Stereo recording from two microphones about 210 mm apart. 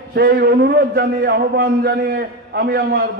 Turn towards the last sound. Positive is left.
turn(degrees=-50)  # may be behind; listen again after turning